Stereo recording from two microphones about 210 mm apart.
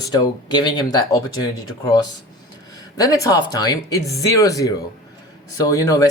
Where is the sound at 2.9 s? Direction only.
15° left (ahead or behind).